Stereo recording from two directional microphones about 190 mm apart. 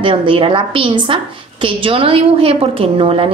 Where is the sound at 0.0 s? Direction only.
30° right (ahead or behind).